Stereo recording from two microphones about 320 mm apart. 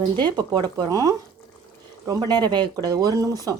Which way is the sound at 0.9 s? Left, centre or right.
Centre.